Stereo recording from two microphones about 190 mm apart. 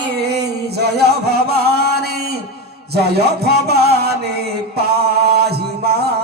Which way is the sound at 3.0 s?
55° right (ahead or behind).